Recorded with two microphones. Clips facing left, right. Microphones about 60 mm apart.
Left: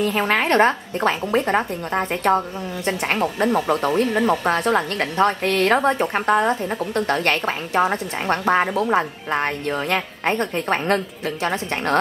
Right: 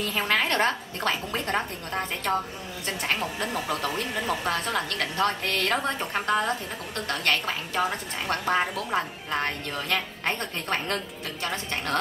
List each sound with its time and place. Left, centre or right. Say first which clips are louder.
0.1 s a woman's voice: left 6 dB; left